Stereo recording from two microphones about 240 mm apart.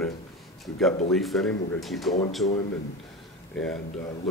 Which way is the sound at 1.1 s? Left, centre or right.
Centre.